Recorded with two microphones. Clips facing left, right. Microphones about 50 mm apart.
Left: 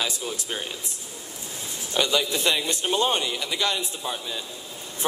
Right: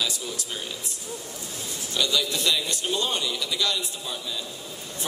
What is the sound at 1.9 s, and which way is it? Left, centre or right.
A man's voice, left.